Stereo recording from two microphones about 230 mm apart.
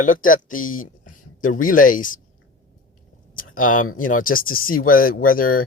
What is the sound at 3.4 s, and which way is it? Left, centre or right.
Speech, left.